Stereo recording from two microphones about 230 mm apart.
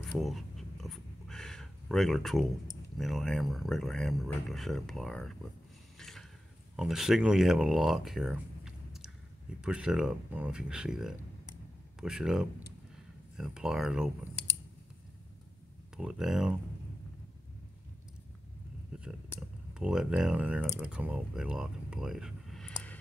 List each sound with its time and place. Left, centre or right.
0.0 s dog: centre
3.0 s speech: centre
5.9 s a sound: centre
6.8 s speech: centre
16.0 s speech: centre
19.8 s speech: centre